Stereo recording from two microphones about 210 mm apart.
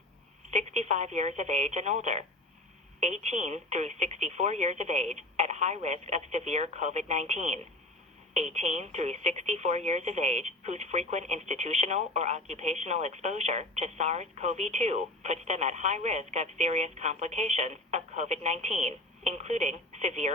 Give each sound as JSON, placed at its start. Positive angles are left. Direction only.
{"t": 0.5, "sound": "speech", "side_deg": -35}